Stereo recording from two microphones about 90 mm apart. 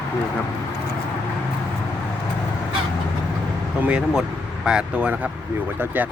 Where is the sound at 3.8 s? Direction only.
10° right (ahead or behind).